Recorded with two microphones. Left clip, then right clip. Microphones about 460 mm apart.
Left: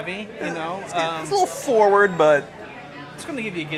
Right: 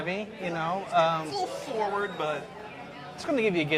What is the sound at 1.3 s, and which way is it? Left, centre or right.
A woman's voice, left.